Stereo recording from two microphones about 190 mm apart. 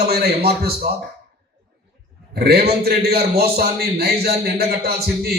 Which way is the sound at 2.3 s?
55° right (ahead or behind).